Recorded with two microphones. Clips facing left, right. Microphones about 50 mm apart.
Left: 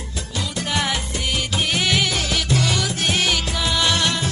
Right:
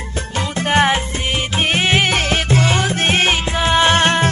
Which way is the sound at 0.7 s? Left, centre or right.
Right.